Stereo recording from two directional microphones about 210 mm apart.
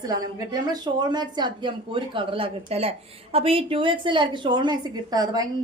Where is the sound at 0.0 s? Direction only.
20° right (ahead or behind).